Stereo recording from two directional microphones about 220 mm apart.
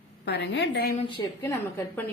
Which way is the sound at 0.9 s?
20° left (ahead or behind).